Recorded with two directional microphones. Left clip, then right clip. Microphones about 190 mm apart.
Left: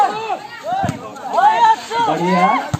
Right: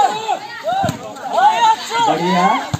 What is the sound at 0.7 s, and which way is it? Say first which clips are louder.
Chop: right 1 dB; 5° right (ahead or behind).